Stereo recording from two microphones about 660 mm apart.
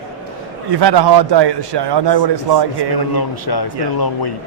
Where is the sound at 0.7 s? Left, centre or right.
Right.